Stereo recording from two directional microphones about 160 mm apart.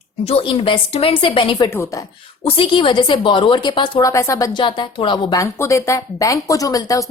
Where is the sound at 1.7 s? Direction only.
20° left (ahead or behind).